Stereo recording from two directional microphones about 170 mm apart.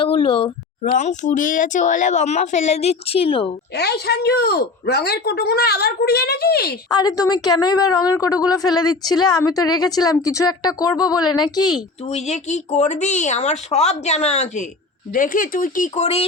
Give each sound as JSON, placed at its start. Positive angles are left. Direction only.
{"t": 0.0, "sound": "a woman's voice", "side_deg": 30}
{"t": 0.9, "sound": "speech", "side_deg": 45}
{"t": 3.8, "sound": "speech", "side_deg": 75}
{"t": 6.9, "sound": "a woman's voice", "side_deg": 20}
{"t": 12.0, "sound": "speech", "side_deg": 40}
{"t": 15.1, "sound": "speech", "side_deg": 55}